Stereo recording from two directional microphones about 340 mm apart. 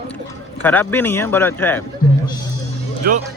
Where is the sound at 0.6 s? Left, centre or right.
Centre.